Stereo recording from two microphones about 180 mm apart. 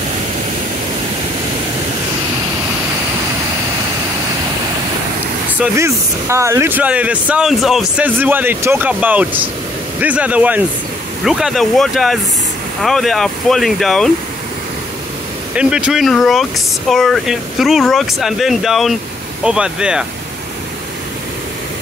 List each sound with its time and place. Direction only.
5.6 s speech: 15° right (ahead or behind); by 14.1 s centre (ahead or behind)
15.5 s speech: 5° right (ahead or behind)